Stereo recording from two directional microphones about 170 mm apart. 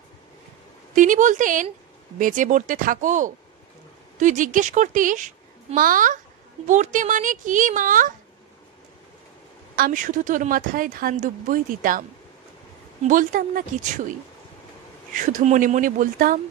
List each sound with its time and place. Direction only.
0.9 s speech: 50° right (ahead or behind)
9.8 s speech: 55° right (ahead or behind)
13.1 s speech: 55° right (ahead or behind)
15.1 s speech: 50° right (ahead or behind)